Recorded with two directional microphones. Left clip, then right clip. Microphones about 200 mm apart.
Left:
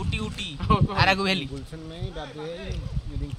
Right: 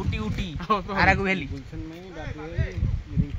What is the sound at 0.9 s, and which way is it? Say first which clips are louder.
Speech: right 2 dB; 20° right (ahead or behind).